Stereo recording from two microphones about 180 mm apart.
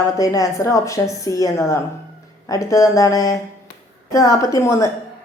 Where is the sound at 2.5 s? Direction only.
20° left (ahead or behind).